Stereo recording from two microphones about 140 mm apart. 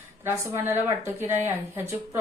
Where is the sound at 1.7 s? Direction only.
20° right (ahead or behind).